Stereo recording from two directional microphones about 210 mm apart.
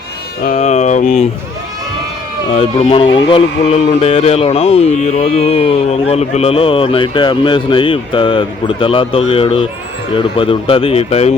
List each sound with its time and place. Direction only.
0.4 s speech: 35° left (ahead or behind)
2.5 s speech: 30° left (ahead or behind)